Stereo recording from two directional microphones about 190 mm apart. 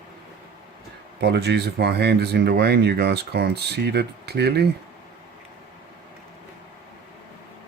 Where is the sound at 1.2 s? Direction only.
60° right (ahead or behind).